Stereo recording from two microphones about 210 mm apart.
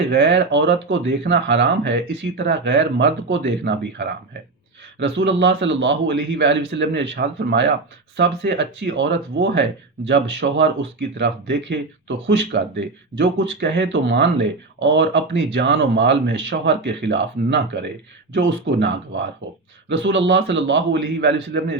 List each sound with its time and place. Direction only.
0.1 s speech: 55° right (ahead or behind)